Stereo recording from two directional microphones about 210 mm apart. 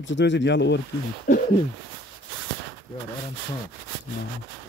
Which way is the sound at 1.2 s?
40° left (ahead or behind).